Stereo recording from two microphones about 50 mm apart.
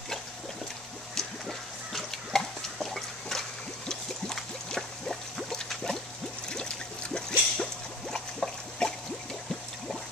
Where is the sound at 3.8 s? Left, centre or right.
Centre.